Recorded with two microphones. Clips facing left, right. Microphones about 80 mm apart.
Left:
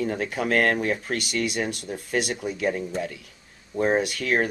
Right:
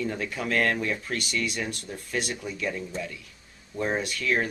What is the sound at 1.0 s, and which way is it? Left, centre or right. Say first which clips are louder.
Speech: left 3 dB; left.